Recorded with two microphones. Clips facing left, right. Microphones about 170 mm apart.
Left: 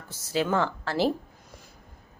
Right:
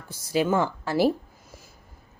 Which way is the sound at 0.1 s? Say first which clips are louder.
Right 3 dB; 10° right (ahead or behind).